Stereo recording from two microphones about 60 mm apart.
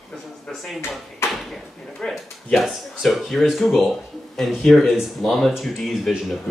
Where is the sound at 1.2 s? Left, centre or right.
Left.